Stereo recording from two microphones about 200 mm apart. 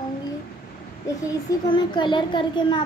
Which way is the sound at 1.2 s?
25° left (ahead or behind).